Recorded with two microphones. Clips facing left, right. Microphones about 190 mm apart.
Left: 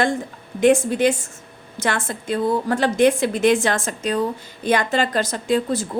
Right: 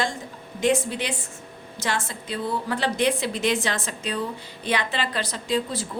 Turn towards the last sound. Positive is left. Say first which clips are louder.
# left 6 dB
turn(degrees=50)  # may be behind; listen again after turning